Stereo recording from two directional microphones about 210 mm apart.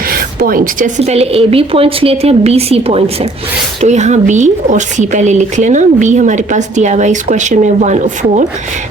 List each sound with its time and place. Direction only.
0.1 s speech: 45° right (ahead or behind)